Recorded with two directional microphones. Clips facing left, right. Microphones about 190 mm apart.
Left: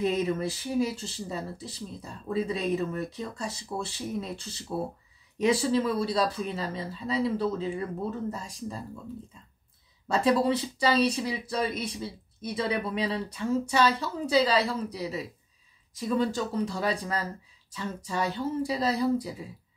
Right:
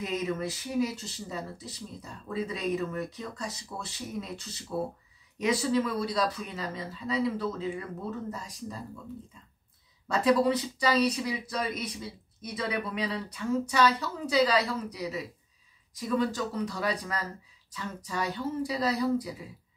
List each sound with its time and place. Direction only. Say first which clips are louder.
0.0 s speech: left 4 dB; 30° left (ahead or behind)
10.0 s speech: even; 30° left (ahead or behind)